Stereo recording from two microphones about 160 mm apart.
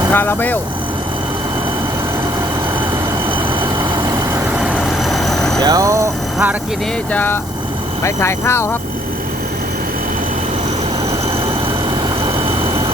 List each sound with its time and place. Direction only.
0.1 s speech: 15° left (ahead or behind)
5.0 s vehicle: centre (ahead or behind)
5.5 s speech: 20° right (ahead or behind)
7.1 s speech: 10° left (ahead or behind)